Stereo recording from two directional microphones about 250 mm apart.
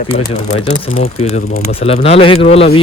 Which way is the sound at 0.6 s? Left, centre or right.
Left.